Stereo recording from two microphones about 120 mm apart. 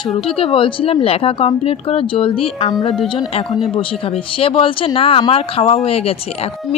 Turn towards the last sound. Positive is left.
turn(degrees=55)  # may be behind; listen again after turning